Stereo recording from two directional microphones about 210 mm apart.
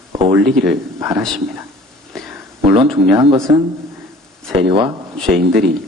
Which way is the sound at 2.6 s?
25° right (ahead or behind).